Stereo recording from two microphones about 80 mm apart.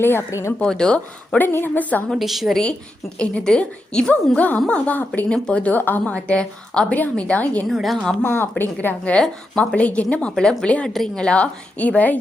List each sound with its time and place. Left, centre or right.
0.0 s a woman's voice: left
0.3 s a woman's voice: left
0.6 s a woman's voice: centre
1.4 s a woman's voice: left
2.0 s a woman's voice: centre
3.2 s a woman's voice: centre
7.7 s a woman's voice: centre
8.2 s a woman's voice: left
9.1 s a woman's voice: centre